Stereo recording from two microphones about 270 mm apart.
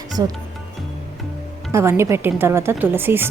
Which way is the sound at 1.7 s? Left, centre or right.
Centre.